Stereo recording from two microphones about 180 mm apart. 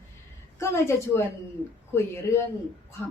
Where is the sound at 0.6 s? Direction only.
15° left (ahead or behind).